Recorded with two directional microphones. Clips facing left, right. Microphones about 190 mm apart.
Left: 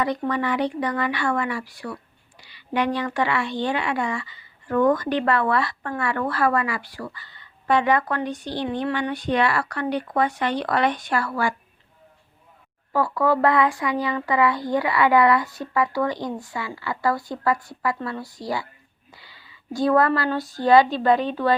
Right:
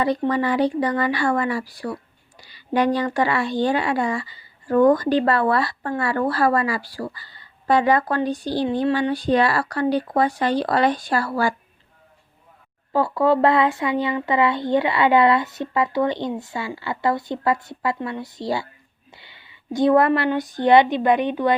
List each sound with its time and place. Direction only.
0.0 s speech: 30° right (ahead or behind)
12.9 s speech: 25° right (ahead or behind)